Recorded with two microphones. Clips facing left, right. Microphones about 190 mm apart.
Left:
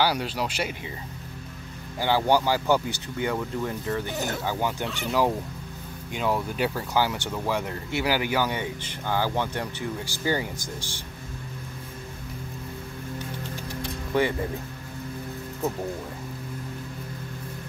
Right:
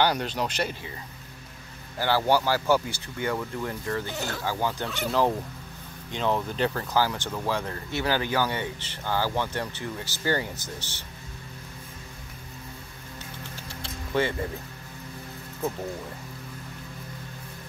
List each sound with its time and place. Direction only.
0.0 s speech: 5° left (ahead or behind)
2.0 s speech: 15° left (ahead or behind)
13.7 s music: 15° left (ahead or behind)